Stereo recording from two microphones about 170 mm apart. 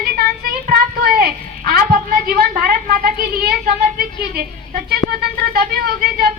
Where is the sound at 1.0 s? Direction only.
60° right (ahead or behind).